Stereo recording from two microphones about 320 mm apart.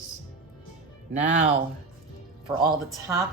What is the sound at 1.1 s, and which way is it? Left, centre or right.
Speech, right.